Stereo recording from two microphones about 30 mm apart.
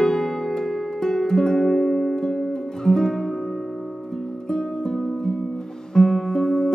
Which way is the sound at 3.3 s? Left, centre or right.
Centre.